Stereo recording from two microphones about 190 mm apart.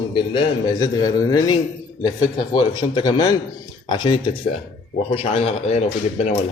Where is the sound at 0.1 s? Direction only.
25° left (ahead or behind).